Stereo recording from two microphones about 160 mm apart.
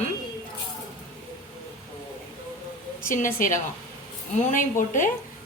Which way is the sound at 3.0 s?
55° left (ahead or behind).